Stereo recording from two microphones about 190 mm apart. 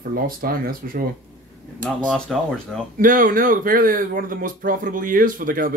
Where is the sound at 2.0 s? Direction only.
5° left (ahead or behind).